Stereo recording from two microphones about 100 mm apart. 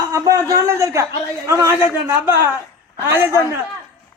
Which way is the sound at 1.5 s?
25° right (ahead or behind).